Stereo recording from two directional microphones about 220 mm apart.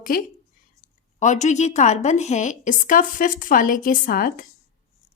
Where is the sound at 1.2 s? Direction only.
35° left (ahead or behind).